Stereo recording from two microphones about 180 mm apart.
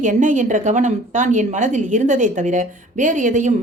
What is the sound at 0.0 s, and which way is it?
A woman's voice, 45° right (ahead or behind).